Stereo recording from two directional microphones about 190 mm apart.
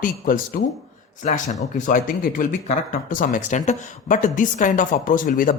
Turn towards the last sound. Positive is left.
turn(degrees=45)  # may be behind; listen again after turning